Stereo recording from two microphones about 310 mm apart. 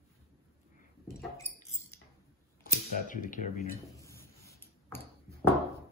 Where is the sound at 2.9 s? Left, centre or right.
Left.